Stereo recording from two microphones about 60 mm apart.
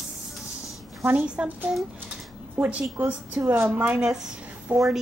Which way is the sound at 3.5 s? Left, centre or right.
Right.